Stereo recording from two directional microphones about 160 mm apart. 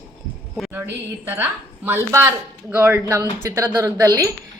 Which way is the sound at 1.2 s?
10° right (ahead or behind).